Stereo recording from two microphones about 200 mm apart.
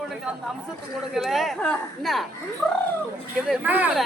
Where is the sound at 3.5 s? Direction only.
10° right (ahead or behind).